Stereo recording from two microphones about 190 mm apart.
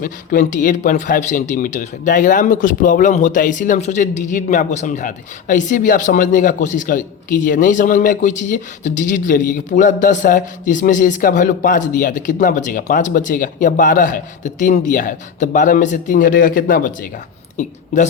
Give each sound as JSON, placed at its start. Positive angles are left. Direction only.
{"t": 0.0, "sound": "a woman's voice", "side_deg": 45}